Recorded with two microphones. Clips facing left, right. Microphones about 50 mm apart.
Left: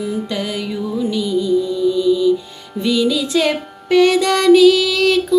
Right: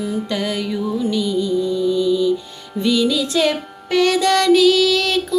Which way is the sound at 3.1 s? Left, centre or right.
Left.